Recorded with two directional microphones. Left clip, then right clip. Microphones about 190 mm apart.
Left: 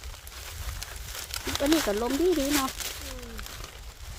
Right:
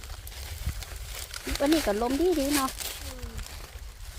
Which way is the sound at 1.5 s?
20° left (ahead or behind).